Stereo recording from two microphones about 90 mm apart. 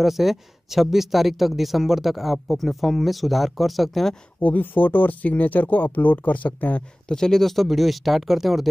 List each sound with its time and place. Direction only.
0.0 s speech: centre (ahead or behind)
4.4 s speech: 15° left (ahead or behind); by 8.6 s centre (ahead or behind)